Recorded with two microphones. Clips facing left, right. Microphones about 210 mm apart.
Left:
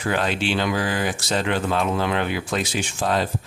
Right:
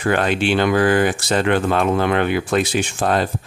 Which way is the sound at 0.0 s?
55° right (ahead or behind).